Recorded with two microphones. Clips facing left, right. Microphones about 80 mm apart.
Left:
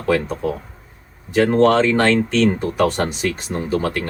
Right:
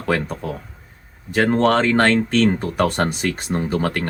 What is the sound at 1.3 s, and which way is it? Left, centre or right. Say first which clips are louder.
Speech: left 2 dB; right.